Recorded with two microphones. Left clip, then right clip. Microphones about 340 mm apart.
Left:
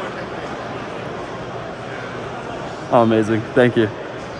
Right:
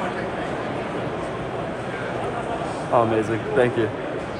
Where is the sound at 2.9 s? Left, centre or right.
Left.